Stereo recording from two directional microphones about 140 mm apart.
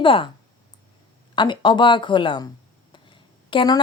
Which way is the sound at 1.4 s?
35° left (ahead or behind).